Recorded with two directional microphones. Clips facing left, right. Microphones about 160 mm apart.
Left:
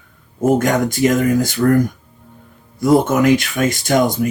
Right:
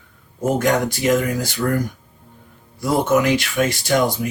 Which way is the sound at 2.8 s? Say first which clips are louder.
Left 4 dB; 50° left (ahead or behind).